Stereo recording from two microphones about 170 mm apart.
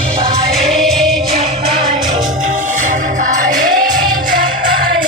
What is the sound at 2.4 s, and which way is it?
Music, 50° right (ahead or behind).